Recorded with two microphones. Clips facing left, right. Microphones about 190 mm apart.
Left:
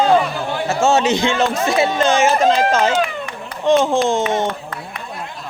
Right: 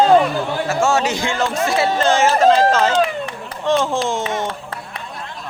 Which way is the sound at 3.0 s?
30° right (ahead or behind).